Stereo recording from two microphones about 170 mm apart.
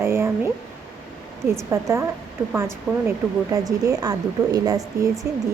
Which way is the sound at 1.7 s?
15° right (ahead or behind).